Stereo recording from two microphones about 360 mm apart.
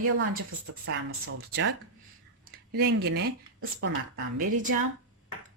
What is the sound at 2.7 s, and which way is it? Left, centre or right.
Speech, right.